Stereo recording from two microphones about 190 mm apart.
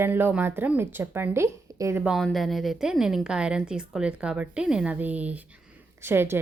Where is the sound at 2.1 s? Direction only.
Centre (ahead or behind).